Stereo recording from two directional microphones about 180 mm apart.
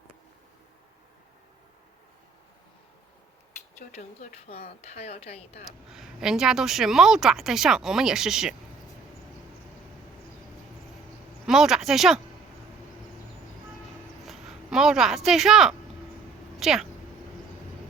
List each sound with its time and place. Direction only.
3.8 s speech: 40° left (ahead or behind)
5.9 s a woman's voice: centre (ahead or behind)
11.4 s speech: centre (ahead or behind)
14.3 s a woman's voice: centre (ahead or behind)